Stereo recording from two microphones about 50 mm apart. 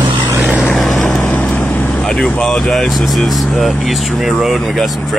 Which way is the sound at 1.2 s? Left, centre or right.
Left.